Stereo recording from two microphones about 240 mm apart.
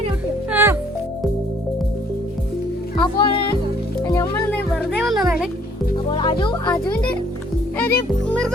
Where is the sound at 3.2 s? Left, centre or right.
Left.